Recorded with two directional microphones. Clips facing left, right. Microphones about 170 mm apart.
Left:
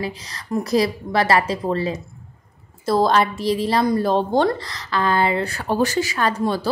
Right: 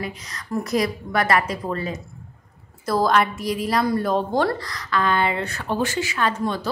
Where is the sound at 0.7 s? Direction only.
30° left (ahead or behind).